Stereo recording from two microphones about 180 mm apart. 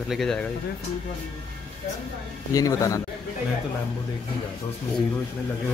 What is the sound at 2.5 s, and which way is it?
Speech, 20° left (ahead or behind).